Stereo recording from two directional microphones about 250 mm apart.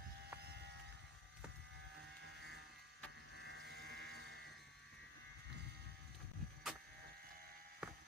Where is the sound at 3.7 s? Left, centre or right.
Right.